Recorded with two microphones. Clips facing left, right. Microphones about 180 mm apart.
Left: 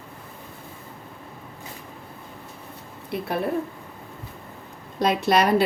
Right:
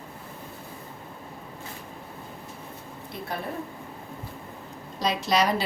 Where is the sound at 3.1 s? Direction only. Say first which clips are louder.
Left 9 dB; 65° left (ahead or behind).